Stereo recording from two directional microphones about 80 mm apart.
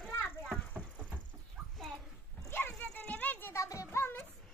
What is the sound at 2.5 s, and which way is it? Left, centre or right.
Dog, left.